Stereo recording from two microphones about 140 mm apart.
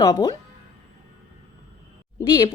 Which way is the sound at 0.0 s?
30° left (ahead or behind).